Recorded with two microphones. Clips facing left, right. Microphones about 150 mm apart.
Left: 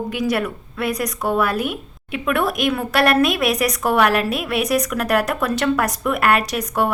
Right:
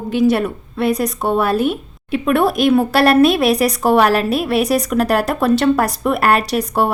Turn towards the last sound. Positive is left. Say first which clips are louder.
# right 4 dB
turn(degrees=-30)  # may be behind; listen again after turning